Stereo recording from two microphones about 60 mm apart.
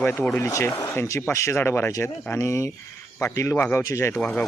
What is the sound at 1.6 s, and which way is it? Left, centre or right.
Speech, left.